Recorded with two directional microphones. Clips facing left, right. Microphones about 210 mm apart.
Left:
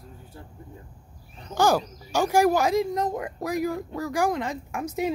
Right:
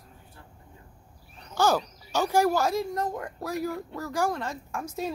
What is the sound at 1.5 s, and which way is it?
Speech, 10° left (ahead or behind).